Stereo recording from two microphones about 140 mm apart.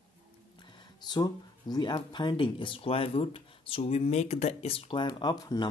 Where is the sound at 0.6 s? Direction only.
30° left (ahead or behind).